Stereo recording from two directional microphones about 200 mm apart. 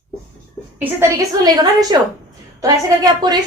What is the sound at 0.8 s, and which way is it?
A woman's voice, 15° right (ahead or behind).